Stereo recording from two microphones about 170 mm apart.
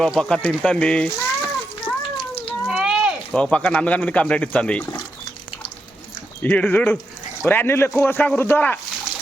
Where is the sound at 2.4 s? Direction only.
Centre (ahead or behind).